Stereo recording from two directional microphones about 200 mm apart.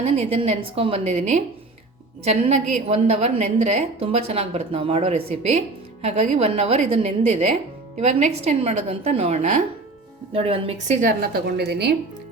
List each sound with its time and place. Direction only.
0.0 s a woman's voice: 35° right (ahead or behind); by 11.9 s 55° right (ahead or behind)